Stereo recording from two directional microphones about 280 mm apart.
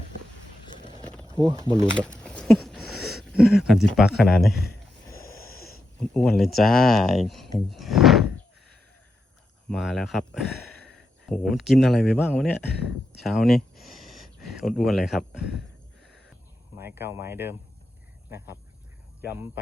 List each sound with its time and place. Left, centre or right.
1.8 s speech: centre
5.0 s snort: centre
6.1 s speech: centre
7.7 s a sound: centre
9.6 s a man's voice: centre
16.7 s speech: centre